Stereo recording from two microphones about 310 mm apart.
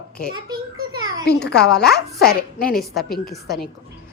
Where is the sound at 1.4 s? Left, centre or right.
Left.